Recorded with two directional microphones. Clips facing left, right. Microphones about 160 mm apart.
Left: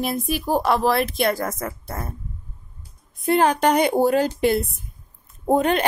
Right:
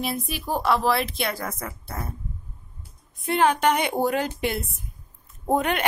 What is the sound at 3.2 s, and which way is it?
A woman's voice, 40° left (ahead or behind).